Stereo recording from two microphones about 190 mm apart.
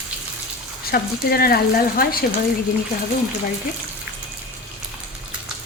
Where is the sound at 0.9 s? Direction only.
50° left (ahead or behind).